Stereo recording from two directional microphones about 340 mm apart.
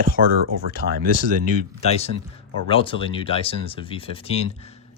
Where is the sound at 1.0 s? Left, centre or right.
Right.